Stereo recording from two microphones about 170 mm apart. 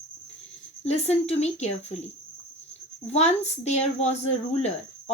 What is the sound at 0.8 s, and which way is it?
A woman's voice, 40° left (ahead or behind).